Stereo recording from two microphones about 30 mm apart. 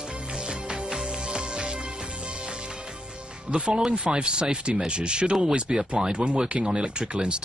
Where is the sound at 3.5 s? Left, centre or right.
Right.